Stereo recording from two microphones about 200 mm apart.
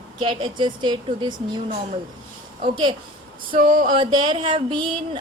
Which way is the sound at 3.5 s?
40° right (ahead or behind).